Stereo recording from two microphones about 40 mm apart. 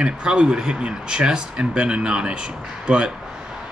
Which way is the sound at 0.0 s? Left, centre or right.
Right.